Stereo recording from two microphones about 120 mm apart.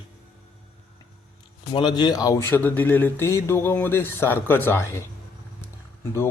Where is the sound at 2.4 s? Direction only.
15° left (ahead or behind).